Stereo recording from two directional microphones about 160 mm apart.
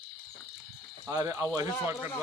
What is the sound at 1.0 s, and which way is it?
Speech, 20° right (ahead or behind).